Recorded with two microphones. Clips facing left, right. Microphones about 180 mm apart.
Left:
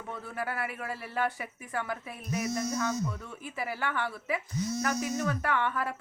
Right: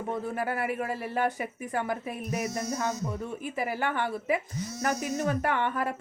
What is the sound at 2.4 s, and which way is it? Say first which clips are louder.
Speech: left 1 dB; 25° right (ahead or behind).